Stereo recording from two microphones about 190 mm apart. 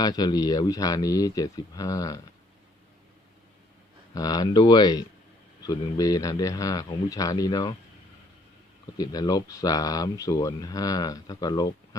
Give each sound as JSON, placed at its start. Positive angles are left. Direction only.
{"t": 0.0, "sound": "speech", "side_deg": 20}
{"t": 4.1, "sound": "speech", "side_deg": 20}
{"t": 9.0, "sound": "speech", "side_deg": 20}